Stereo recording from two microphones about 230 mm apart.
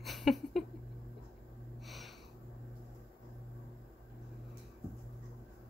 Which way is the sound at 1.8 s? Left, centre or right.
Centre.